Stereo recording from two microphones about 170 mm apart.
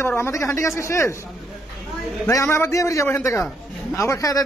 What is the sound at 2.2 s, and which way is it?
A man's voice, 15° left (ahead or behind).